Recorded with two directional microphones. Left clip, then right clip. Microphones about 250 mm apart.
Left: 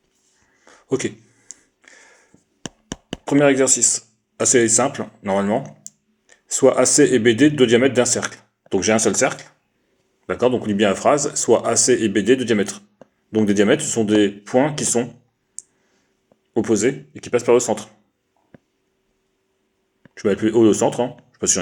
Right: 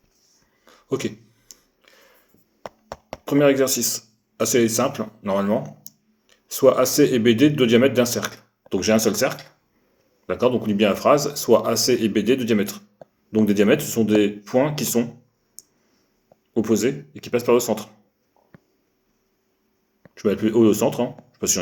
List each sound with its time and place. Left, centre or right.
0.6 s a sound: left
3.2 s speech: left
16.6 s speech: left
20.1 s speech: left